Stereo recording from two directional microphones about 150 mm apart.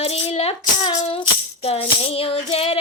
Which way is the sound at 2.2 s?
40° left (ahead or behind).